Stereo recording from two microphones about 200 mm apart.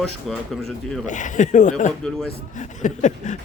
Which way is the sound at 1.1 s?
40° left (ahead or behind).